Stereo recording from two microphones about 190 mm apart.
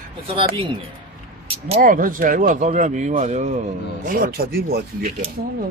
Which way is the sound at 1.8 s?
45° right (ahead or behind).